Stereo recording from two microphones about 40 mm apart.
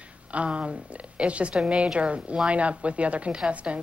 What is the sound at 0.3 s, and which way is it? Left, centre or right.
A woman's voice, right.